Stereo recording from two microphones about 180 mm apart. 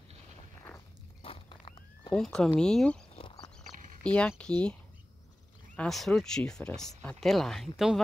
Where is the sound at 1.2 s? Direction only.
30° left (ahead or behind).